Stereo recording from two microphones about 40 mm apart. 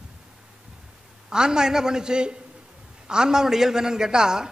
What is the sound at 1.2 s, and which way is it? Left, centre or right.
A man's voice, centre.